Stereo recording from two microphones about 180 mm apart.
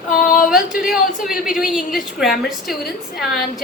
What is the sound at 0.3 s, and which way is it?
A woman's voice, 5° right (ahead or behind).